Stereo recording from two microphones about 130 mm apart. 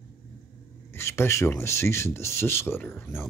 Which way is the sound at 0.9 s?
20° left (ahead or behind).